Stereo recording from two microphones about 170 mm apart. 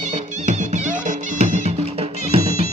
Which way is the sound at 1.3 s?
45° right (ahead or behind).